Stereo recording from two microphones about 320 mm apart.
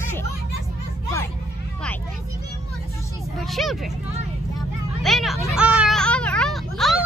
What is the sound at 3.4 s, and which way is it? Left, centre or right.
Vehicle, centre.